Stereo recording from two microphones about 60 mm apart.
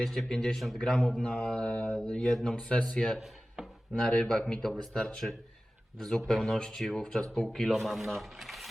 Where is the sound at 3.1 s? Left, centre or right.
Centre.